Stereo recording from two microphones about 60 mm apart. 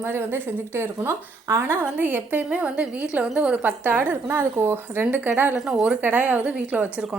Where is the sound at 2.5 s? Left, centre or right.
Centre.